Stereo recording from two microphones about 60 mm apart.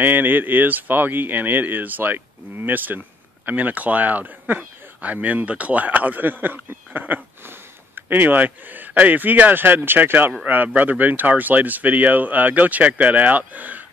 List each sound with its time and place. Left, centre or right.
0.0 s speech: right